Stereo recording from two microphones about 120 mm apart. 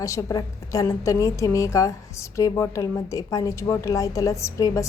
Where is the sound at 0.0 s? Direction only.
25° left (ahead or behind).